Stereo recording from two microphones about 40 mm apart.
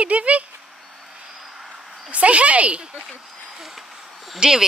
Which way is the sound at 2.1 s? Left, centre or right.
Right.